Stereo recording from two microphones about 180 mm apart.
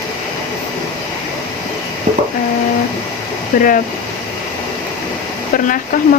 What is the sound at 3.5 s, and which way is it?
Speech, 50° left (ahead or behind).